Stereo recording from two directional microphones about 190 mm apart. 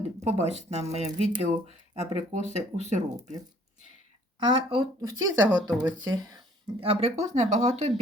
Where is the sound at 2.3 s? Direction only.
35° right (ahead or behind).